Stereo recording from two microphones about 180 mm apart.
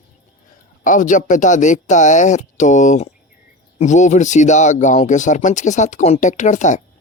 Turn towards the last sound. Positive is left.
turn(degrees=45)  # may be behind; listen again after turning